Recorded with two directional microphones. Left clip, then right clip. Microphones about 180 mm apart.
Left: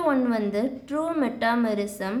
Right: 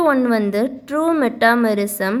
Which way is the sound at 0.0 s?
40° right (ahead or behind).